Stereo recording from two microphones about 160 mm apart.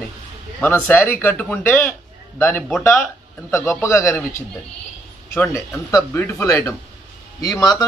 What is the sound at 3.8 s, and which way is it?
Speech, 20° left (ahead or behind).